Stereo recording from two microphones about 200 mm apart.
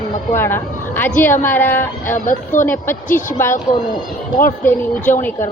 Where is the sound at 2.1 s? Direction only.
40° left (ahead or behind).